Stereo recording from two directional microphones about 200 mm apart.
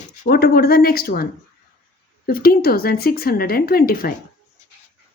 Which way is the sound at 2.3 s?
50° left (ahead or behind).